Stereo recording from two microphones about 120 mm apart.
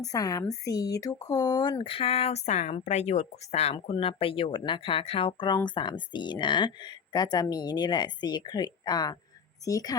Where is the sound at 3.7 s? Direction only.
50° left (ahead or behind).